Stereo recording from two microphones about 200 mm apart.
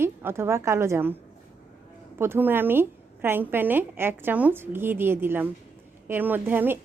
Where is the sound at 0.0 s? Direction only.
10° right (ahead or behind).